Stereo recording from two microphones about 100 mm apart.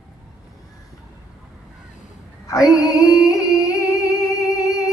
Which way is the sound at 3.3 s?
35° left (ahead or behind).